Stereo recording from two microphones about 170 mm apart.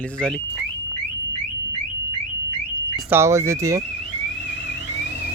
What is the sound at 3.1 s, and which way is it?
Speech, 15° right (ahead or behind).